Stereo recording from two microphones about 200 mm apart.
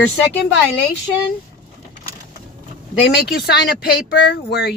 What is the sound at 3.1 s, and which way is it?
Speech, 55° left (ahead or behind).